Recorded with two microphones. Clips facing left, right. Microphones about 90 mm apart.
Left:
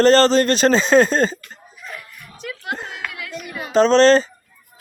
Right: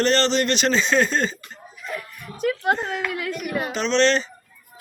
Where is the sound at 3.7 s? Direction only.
40° left (ahead or behind).